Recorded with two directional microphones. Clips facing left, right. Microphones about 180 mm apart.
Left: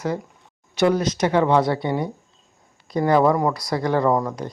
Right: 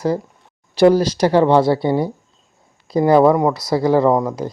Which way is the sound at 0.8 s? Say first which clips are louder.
Right 6 dB; 35° right (ahead or behind).